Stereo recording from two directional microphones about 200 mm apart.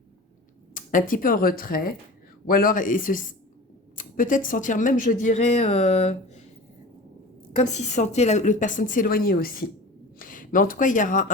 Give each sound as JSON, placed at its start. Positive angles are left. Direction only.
{"t": 0.7, "sound": "speech", "side_deg": 40}
{"t": 7.5, "sound": "speech", "side_deg": 35}